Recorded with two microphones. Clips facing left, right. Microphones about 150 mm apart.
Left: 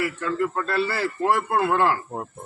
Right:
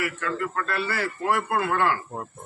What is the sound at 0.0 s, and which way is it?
A man's voice, 30° left (ahead or behind).